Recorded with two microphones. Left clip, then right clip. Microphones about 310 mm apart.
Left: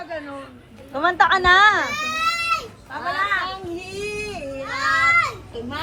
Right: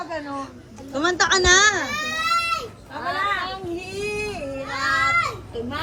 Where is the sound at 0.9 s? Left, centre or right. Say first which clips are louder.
Left 3 dB; centre.